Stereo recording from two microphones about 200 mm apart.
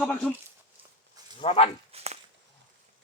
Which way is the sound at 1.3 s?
30° left (ahead or behind).